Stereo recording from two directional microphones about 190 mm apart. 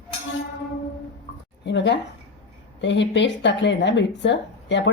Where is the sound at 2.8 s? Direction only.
70° left (ahead or behind).